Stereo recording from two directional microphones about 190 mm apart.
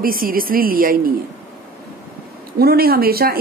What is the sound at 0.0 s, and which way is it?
Speech, 50° right (ahead or behind).